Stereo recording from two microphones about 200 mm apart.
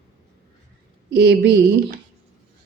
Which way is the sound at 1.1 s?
55° right (ahead or behind).